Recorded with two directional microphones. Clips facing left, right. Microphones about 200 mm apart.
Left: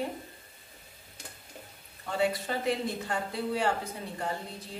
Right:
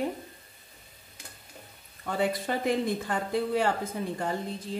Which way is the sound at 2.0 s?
50° right (ahead or behind).